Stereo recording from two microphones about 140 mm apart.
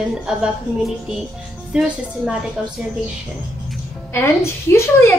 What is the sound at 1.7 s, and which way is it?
Speech, 5° right (ahead or behind).